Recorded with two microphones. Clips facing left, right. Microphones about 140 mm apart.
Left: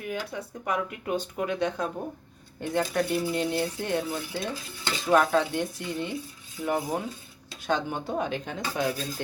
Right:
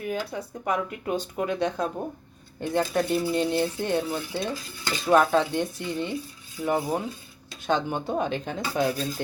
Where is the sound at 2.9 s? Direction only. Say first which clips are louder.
Right 2 dB; 25° right (ahead or behind).